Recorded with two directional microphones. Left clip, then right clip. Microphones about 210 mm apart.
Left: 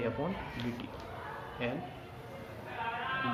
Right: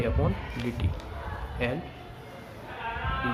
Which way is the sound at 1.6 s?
25° right (ahead or behind).